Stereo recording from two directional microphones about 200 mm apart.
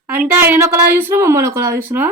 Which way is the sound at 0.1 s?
10° right (ahead or behind).